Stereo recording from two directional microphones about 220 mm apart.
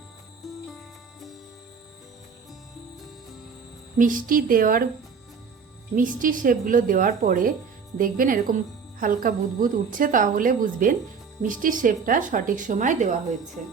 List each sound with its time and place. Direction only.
0.4 s music: centre (ahead or behind)
3.9 s a woman's voice: 35° right (ahead or behind)
6.0 s a woman's voice: 35° right (ahead or behind)